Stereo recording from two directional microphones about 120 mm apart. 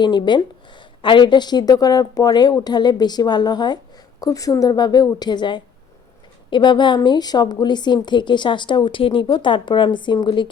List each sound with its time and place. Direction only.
0.0 s a woman's voice: 40° left (ahead or behind)